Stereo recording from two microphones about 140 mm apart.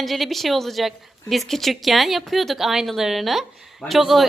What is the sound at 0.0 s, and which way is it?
A woman's voice, centre (ahead or behind).